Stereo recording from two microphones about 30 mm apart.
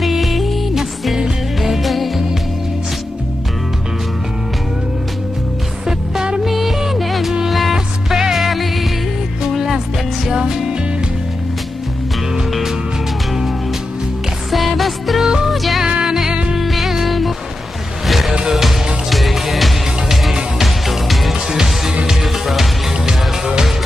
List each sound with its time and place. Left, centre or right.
0.0 s music: centre
1.6 s music: centre
6.4 s music: centre
7.7 s music: centre
14.5 s music: centre